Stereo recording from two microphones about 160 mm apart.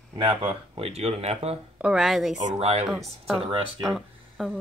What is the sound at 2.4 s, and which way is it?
Speech, 35° right (ahead or behind).